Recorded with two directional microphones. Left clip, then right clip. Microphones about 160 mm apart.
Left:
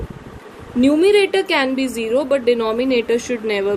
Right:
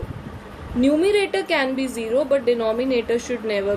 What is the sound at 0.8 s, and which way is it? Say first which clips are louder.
A woman's voice: left 5 dB; 60° left (ahead or behind).